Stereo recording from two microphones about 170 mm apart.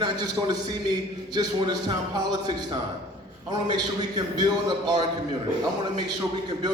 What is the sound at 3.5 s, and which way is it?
A man's voice, 25° right (ahead or behind).